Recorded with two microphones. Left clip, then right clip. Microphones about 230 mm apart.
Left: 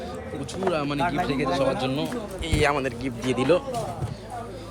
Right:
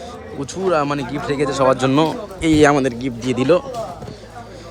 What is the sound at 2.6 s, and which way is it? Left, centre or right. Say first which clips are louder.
Speech: right 7 dB; right.